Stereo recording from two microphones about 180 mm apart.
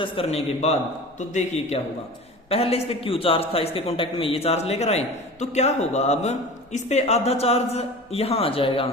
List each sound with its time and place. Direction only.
0.0 s a man's voice: 30° left (ahead or behind)